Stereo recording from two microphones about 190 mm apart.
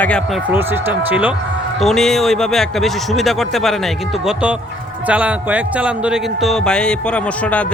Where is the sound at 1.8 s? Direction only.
Centre (ahead or behind).